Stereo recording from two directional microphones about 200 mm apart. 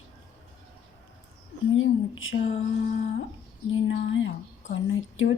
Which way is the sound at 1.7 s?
75° left (ahead or behind).